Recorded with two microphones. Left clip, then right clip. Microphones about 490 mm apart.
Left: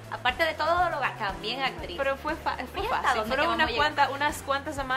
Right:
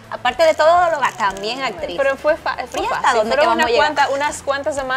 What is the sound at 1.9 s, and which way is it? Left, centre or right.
A woman's voice, right.